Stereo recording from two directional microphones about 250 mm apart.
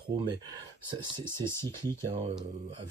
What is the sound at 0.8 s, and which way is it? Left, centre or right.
Speech, centre.